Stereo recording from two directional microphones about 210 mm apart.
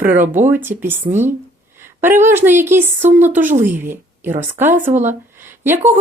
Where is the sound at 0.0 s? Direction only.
10° right (ahead or behind).